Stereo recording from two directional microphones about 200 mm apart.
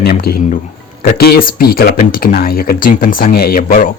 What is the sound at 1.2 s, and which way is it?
Speech, 50° left (ahead or behind).